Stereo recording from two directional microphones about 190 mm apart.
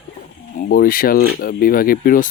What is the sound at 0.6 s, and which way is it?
Speech, 50° left (ahead or behind).